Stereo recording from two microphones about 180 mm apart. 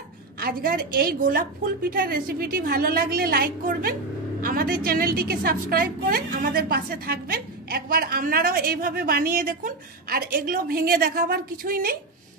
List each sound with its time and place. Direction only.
0.4 s a woman's voice: 55° right (ahead or behind)